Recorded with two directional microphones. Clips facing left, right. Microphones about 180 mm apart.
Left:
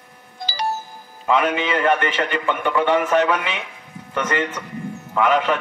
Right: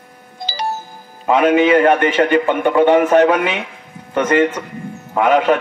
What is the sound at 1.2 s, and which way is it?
A man's voice, 45° right (ahead or behind).